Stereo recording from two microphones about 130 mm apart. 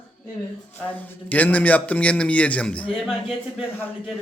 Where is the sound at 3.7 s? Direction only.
15° left (ahead or behind).